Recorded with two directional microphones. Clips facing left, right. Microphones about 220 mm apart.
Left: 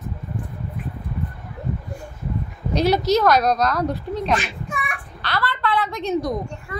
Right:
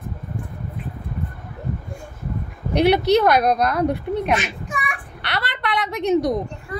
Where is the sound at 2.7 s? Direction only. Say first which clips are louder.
Right 2 dB; 60° right (ahead or behind).